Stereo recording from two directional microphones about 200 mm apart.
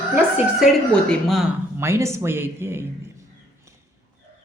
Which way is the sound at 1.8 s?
15° right (ahead or behind).